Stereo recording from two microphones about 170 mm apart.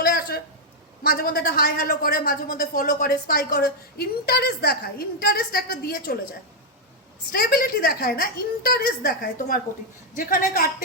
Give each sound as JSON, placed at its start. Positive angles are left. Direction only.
{"t": 0.0, "sound": "a sound", "side_deg": 60}
{"t": 1.0, "sound": "speech", "side_deg": 60}
{"t": 7.3, "sound": "a woman's voice", "side_deg": 60}